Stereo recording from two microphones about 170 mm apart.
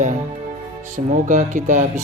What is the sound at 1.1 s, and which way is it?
Music, 50° right (ahead or behind).